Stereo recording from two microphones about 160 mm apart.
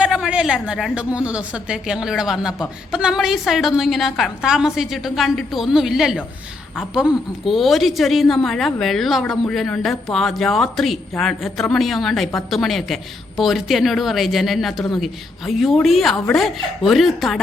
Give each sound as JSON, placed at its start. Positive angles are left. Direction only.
{"t": 0.0, "sound": "a woman's voice", "side_deg": -5}